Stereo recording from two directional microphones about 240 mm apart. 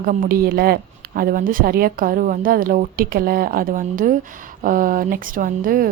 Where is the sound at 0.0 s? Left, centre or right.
Right.